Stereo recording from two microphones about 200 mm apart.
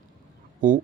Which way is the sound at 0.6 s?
40° right (ahead or behind).